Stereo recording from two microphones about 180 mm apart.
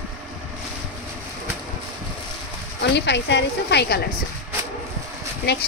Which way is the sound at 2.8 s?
75° left (ahead or behind).